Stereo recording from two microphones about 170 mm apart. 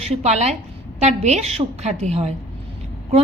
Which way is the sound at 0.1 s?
40° right (ahead or behind).